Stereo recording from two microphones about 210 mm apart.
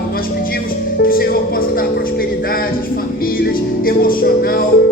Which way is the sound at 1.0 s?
45° left (ahead or behind).